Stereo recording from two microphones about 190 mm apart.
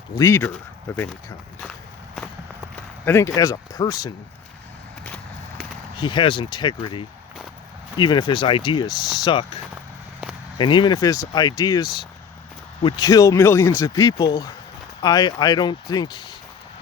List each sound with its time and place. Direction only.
0.2 s speech: 15° left (ahead or behind)
2.7 s speech: 10° left (ahead or behind)
5.0 s walk: 5° left (ahead or behind)
6.0 s speech: 25° left (ahead or behind)
10.6 s speech: 25° left (ahead or behind)